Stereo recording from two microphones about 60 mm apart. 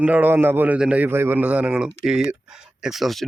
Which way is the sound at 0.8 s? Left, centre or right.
Right.